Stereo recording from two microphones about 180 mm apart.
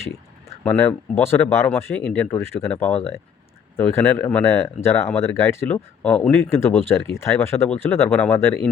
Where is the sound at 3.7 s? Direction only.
15° left (ahead or behind).